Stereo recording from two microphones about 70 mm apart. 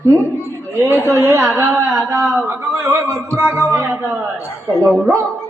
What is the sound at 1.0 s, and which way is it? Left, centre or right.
Speech, right.